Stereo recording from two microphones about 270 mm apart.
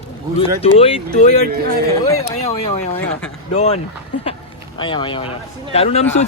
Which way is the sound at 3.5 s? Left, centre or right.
Left.